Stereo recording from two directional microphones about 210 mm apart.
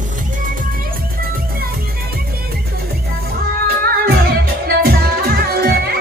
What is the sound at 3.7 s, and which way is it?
Music, 45° right (ahead or behind).